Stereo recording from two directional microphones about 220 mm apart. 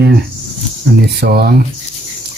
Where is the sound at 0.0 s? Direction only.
50° right (ahead or behind).